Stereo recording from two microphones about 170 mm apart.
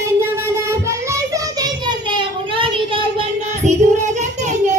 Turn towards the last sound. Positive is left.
turn(degrees=-45)  # may be behind; listen again after turning